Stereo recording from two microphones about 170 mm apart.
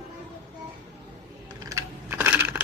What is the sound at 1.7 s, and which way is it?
Coin, 20° right (ahead or behind).